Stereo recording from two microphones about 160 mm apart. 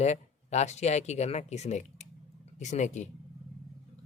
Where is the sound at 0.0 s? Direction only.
45° left (ahead or behind).